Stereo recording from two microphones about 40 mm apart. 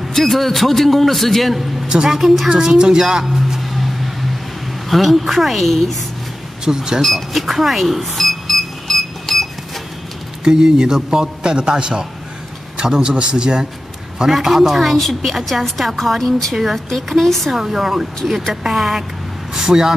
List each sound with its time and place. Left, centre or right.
0.1 s a woman's voice: centre
1.9 s a woman's voice: centre
4.8 s a woman's voice: centre
6.6 s a woman's voice: centre
7.0 s a sound: centre
10.4 s a man's voice: centre
14.3 s a woman's voice: centre
16.9 s a woman's voice: centre
17.5 s a woman's voice: centre